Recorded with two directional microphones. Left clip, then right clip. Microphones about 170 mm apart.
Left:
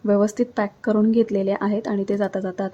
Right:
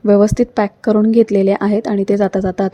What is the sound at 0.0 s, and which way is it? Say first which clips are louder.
A woman's voice: right 8 dB; 30° right (ahead or behind).